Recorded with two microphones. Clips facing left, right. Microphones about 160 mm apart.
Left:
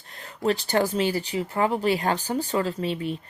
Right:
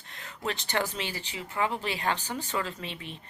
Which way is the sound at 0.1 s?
35° left (ahead or behind).